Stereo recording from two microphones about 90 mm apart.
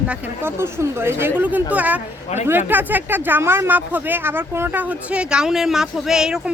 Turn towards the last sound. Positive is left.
turn(degrees=-5)  # may be behind; listen again after turning